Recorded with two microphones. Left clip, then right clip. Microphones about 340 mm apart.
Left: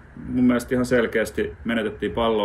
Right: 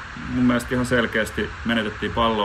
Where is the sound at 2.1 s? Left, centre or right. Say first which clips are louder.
Right 1 dB; right.